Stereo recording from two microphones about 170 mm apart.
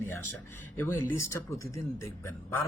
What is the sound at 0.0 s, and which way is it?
A man's voice, 15° left (ahead or behind).